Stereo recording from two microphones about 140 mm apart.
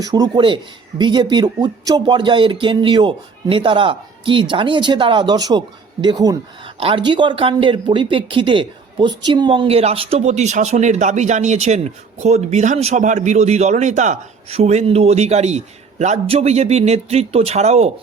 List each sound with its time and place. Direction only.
0.0 s speech: 30° right (ahead or behind)
6.7 s speech: 40° right (ahead or behind)